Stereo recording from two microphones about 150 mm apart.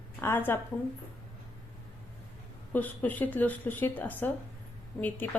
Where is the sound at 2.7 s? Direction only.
10° left (ahead or behind).